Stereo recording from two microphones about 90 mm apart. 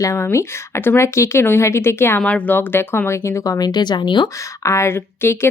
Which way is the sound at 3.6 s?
55° left (ahead or behind).